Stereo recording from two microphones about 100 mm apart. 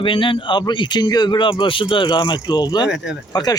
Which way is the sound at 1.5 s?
60° left (ahead or behind).